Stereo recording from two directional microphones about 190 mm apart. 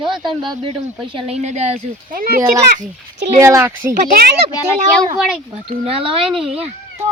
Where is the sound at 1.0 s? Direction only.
30° right (ahead or behind); by 2.4 s 50° right (ahead or behind).